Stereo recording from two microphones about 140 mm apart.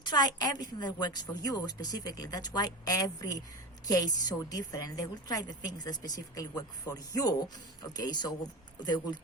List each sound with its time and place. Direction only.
0.0 s a woman's voice: 30° left (ahead or behind)